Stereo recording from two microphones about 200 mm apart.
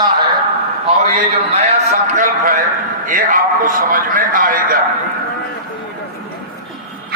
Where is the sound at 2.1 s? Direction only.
40° right (ahead or behind).